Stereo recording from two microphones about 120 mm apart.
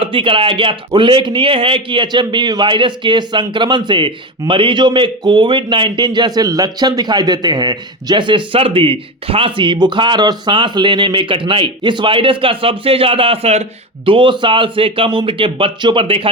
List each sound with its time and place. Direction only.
0.0 s speech: 45° right (ahead or behind)